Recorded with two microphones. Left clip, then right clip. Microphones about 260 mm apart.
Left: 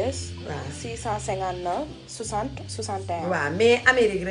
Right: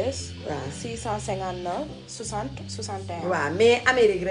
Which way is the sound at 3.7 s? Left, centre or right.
Right.